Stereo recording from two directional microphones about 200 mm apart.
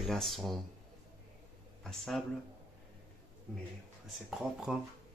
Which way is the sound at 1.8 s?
Centre (ahead or behind).